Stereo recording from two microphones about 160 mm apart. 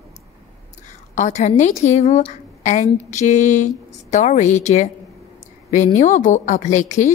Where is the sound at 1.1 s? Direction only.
50° left (ahead or behind).